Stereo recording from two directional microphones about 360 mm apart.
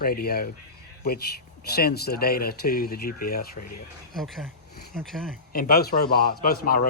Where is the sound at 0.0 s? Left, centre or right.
Left.